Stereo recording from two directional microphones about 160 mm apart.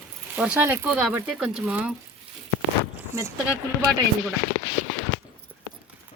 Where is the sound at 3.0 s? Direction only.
15° right (ahead or behind).